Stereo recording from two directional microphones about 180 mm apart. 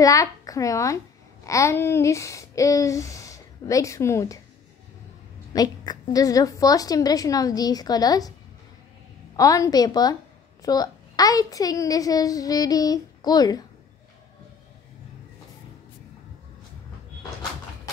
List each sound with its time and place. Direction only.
0.0 s a child's voice: 20° left (ahead or behind)
5.5 s a woman's voice: 20° left (ahead or behind)
9.4 s a woman's voice: 20° left (ahead or behind)